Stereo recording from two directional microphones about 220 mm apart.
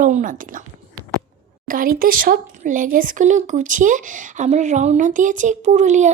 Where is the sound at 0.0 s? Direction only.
35° right (ahead or behind).